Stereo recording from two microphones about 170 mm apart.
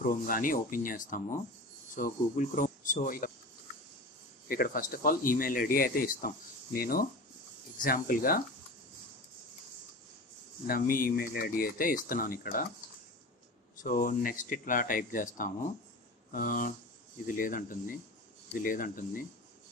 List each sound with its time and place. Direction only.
0.0 s speech: 55° left (ahead or behind)
4.5 s speech: 60° left (ahead or behind)
10.7 s speech: 55° left (ahead or behind)
13.7 s speech: 55° left (ahead or behind)